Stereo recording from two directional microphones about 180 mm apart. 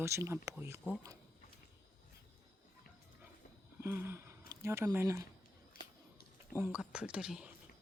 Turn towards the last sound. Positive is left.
turn(degrees=-5)  # may be behind; listen again after turning